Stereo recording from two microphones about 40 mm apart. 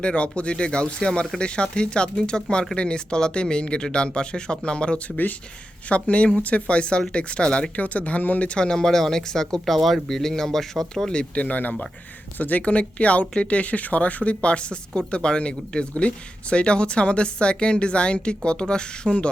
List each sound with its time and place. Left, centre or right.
0.0 s speech: left
5.0 s speech: left
5.9 s speech: left
7.8 s speech: left
8.5 s speech: centre
11.1 s speech: left